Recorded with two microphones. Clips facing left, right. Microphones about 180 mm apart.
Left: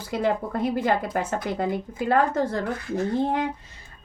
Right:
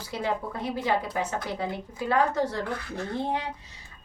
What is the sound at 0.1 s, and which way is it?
Speech, 55° left (ahead or behind).